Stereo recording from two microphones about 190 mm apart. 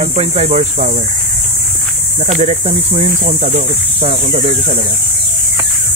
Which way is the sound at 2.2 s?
35° right (ahead or behind).